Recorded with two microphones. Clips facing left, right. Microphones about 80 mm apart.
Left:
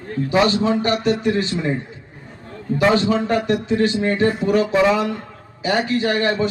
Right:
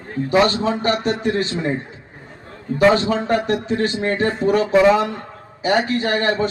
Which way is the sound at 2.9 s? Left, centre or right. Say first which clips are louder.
Even; right.